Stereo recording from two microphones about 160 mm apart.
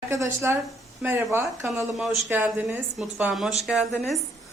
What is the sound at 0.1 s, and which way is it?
Speech, 15° right (ahead or behind).